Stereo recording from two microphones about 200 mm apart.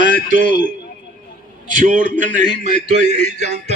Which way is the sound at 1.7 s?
40° right (ahead or behind).